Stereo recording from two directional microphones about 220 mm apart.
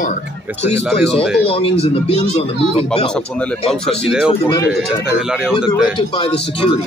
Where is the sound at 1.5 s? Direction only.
25° left (ahead or behind).